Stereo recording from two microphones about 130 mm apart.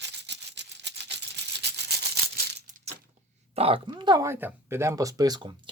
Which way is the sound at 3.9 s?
35° right (ahead or behind).